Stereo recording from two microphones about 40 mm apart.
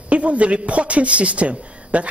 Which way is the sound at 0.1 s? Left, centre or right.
Right.